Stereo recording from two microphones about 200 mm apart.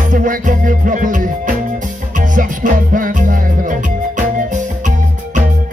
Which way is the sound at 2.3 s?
40° right (ahead or behind).